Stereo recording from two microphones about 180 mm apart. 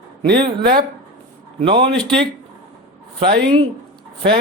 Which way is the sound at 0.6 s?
55° right (ahead or behind).